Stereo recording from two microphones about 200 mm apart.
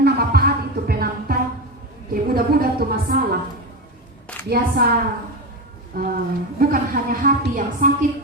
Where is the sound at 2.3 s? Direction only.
50° right (ahead or behind).